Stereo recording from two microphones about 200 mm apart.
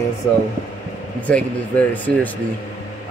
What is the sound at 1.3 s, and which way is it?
Speech, 5° left (ahead or behind).